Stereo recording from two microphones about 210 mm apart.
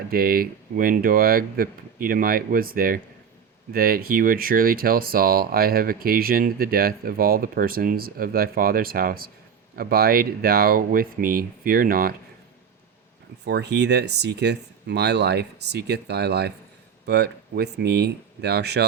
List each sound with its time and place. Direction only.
0.1 s speech: 45° right (ahead or behind)
13.4 s speech: 55° right (ahead or behind)